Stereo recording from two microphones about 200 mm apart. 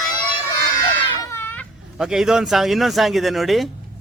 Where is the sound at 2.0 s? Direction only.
5° right (ahead or behind).